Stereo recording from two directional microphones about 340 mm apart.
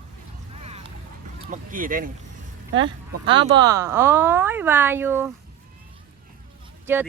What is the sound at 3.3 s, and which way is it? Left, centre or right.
Speech, centre.